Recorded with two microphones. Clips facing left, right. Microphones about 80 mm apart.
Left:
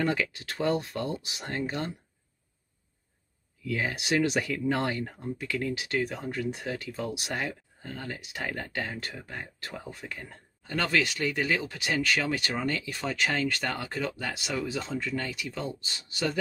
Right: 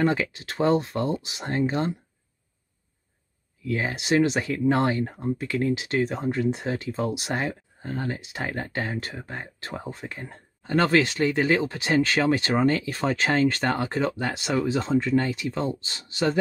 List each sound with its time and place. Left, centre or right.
0.0 s speech: right
3.6 s speech: right